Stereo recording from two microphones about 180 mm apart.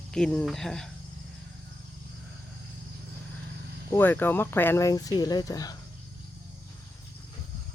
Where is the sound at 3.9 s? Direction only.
10° left (ahead or behind).